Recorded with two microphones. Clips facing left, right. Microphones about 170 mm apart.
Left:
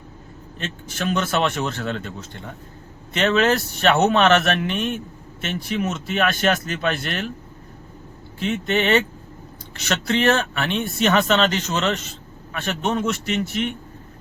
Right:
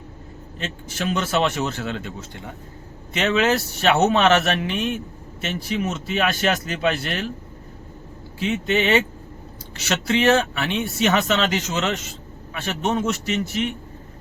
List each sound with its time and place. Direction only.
0.6 s speech: 50° left (ahead or behind)
3.2 s speech: 55° left (ahead or behind)
8.4 s speech: 55° left (ahead or behind)
10.2 s speech: 55° left (ahead or behind)
12.5 s speech: 55° left (ahead or behind)